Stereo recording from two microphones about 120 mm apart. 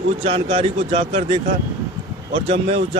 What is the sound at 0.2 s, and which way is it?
Speech, 55° right (ahead or behind).